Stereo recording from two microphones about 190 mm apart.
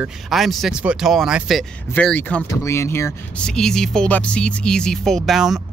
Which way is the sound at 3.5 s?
5° left (ahead or behind).